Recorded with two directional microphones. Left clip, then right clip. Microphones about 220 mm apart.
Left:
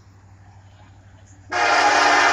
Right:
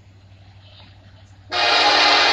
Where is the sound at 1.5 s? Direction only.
30° right (ahead or behind).